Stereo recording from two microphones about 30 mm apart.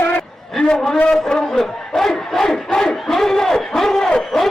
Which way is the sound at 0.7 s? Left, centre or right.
Left.